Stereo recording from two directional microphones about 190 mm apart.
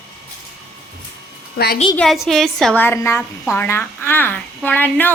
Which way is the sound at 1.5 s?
55° left (ahead or behind).